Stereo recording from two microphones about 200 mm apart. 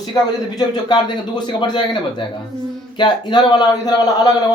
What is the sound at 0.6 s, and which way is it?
Speech, 20° left (ahead or behind).